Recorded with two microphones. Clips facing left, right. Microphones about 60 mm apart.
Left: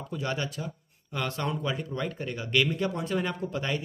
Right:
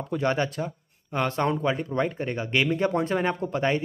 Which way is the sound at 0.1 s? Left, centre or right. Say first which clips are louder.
Right 7 dB; right.